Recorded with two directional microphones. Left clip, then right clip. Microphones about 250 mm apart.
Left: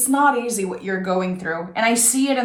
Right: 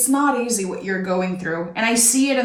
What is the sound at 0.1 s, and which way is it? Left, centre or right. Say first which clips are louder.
A woman's voice: left 2 dB; left.